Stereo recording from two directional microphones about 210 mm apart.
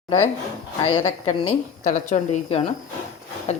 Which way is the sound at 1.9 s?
40° left (ahead or behind).